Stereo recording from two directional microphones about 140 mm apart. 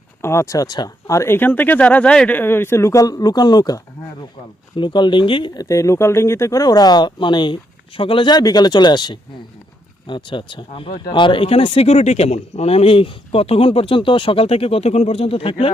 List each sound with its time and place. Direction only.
0.2 s speech: 20° left (ahead or behind)
4.8 s speech: 35° left (ahead or behind)
5.6 s speech: 20° left (ahead or behind); by 15.7 s 40° left (ahead or behind)